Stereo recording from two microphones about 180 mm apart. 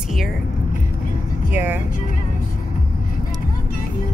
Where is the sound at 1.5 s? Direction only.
10° right (ahead or behind).